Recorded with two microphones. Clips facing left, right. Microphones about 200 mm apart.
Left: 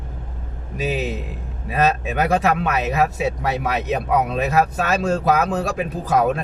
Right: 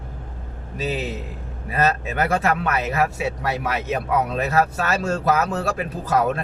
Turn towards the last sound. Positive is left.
turn(degrees=15)  # may be behind; listen again after turning